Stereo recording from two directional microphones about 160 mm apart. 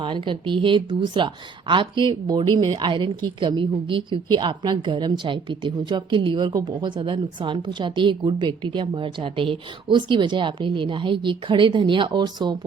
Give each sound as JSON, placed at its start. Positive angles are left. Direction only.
{"t": 0.0, "sound": "a woman's voice", "side_deg": -30}